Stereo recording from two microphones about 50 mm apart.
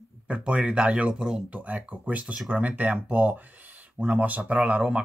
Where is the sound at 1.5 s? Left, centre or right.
Right.